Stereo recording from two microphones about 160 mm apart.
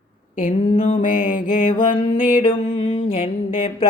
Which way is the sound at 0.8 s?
55° left (ahead or behind).